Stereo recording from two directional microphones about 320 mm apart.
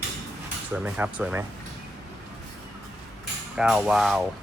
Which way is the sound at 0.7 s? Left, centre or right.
Centre.